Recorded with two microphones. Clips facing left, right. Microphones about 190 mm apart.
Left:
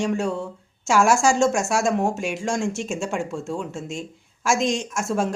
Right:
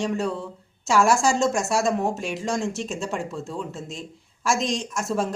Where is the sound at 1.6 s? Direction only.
5° right (ahead or behind).